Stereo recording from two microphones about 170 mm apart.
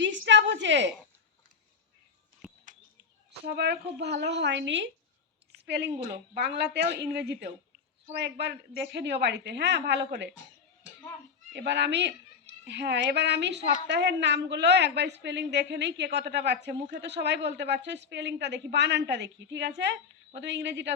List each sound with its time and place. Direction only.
0.0 s a sound: 90° right
3.4 s a woman's voice: 75° right (ahead or behind); by 4.9 s 90° right
5.6 s a woman's voice: 80° right
11.5 s a woman's voice: 90° right